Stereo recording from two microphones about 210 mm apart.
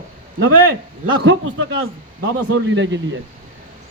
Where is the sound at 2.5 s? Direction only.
60° right (ahead or behind).